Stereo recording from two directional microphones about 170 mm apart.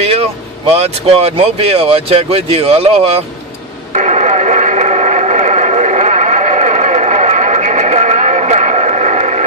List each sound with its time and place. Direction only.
0.0 s vehicle: 35° right (ahead or behind)
1.1 s speech: 35° right (ahead or behind)
3.9 s radio: 45° right (ahead or behind)